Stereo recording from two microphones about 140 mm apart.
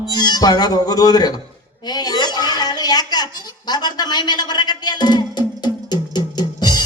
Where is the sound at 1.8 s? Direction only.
30° left (ahead or behind).